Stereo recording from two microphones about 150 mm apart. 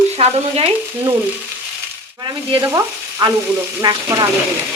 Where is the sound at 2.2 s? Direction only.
25° right (ahead or behind).